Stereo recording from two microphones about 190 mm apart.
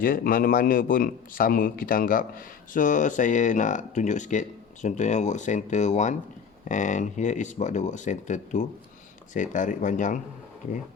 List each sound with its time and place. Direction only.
0.0 s a man's voice: 45° left (ahead or behind)